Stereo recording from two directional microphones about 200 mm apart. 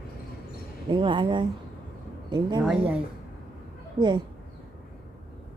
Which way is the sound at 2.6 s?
5° right (ahead or behind).